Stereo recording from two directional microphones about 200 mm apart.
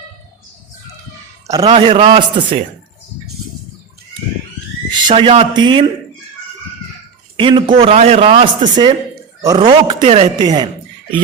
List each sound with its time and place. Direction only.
1.5 s a man's voice: 20° right (ahead or behind)
4.9 s a man's voice: 25° right (ahead or behind)
7.3 s a man's voice: 25° right (ahead or behind)